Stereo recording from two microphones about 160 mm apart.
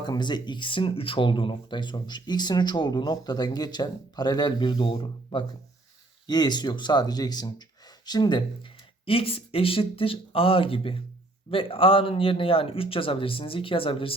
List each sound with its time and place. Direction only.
0.0 s speech: 25° left (ahead or behind)